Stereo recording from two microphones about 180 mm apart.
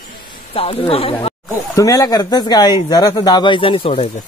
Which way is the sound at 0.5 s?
30° left (ahead or behind).